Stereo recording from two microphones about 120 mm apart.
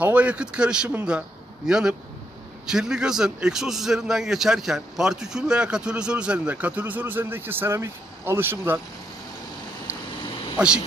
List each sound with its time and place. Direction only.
0.0 s a man's voice: 10° right (ahead or behind)
10.6 s a man's voice: 10° right (ahead or behind)